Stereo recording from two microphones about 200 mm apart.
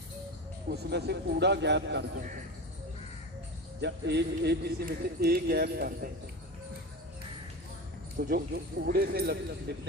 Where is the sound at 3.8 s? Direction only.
55° right (ahead or behind).